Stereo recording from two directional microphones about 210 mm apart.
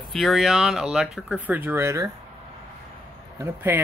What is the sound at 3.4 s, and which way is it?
Speech, 10° right (ahead or behind).